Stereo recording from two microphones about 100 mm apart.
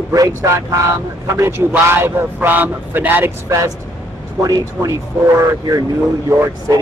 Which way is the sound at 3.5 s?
30° right (ahead or behind).